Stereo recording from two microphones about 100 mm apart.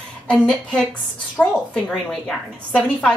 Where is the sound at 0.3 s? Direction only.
10° left (ahead or behind).